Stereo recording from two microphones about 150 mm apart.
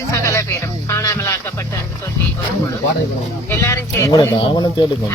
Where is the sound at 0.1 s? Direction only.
20° left (ahead or behind).